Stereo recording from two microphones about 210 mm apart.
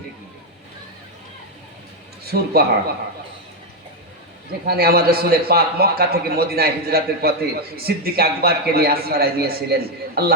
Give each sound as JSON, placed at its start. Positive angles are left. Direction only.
{"t": 2.2, "sound": "a man's voice", "side_deg": -45}
{"t": 4.6, "sound": "a man's voice", "side_deg": -50}